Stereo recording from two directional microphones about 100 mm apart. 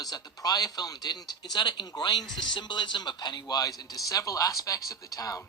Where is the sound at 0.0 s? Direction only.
40° left (ahead or behind).